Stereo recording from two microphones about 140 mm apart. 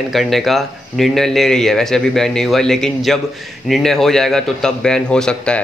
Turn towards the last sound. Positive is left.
turn(degrees=5)  # may be behind; listen again after turning